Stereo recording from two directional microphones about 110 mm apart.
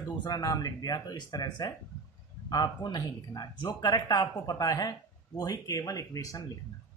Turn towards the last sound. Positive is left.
turn(degrees=35)  # may be behind; listen again after turning